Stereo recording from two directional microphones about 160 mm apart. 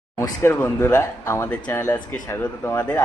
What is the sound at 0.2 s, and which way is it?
Speech, 15° left (ahead or behind).